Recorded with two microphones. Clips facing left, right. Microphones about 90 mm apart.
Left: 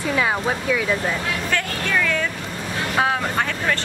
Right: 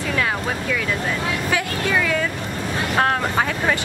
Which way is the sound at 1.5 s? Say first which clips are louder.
Right 2 dB; 10° right (ahead or behind).